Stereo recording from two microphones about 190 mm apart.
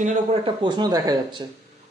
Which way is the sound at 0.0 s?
40° right (ahead or behind).